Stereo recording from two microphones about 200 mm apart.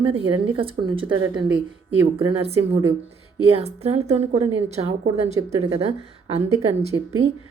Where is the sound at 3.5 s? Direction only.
30° right (ahead or behind).